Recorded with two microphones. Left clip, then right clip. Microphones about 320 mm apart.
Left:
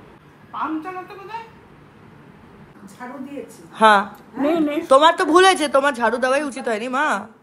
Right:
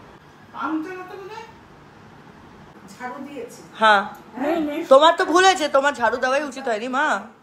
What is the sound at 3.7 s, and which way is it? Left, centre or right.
A man's voice, centre.